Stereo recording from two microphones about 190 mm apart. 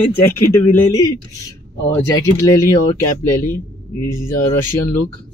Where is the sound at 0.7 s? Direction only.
20° left (ahead or behind).